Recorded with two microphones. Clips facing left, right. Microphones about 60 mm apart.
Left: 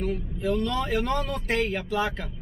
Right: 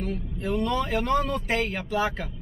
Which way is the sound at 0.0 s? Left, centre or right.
Centre.